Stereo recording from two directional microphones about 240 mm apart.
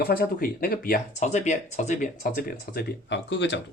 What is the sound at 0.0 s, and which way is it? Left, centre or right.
Speech, left.